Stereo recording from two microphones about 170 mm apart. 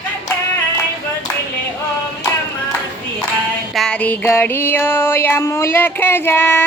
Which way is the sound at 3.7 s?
5° left (ahead or behind).